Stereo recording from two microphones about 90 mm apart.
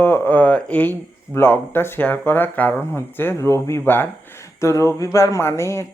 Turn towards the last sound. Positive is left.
turn(degrees=30)  # may be behind; listen again after turning